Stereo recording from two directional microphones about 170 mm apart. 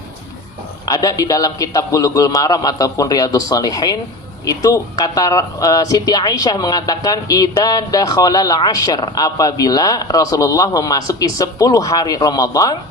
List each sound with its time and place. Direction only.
0.9 s speech: 20° left (ahead or behind)